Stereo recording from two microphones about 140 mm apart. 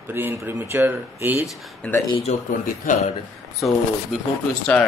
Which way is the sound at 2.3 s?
55° left (ahead or behind).